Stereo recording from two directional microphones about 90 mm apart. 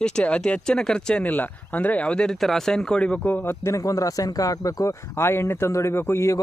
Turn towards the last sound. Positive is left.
turn(degrees=30)  # may be behind; listen again after turning